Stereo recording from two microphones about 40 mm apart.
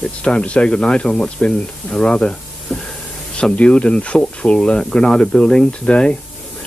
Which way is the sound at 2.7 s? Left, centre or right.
Centre.